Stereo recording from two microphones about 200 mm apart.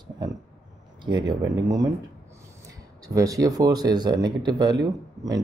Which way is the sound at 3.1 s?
15° right (ahead or behind).